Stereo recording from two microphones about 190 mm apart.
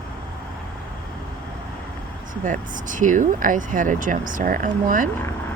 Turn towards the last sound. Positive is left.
turn(degrees=-45)  # may be behind; listen again after turning